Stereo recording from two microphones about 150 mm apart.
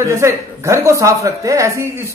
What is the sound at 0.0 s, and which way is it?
A woman's voice, 20° right (ahead or behind).